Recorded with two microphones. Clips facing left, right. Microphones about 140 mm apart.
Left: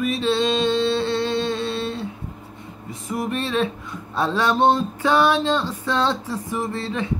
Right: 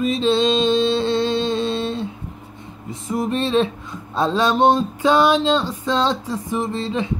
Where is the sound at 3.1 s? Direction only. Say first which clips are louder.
Right 4 dB; 25° right (ahead or behind).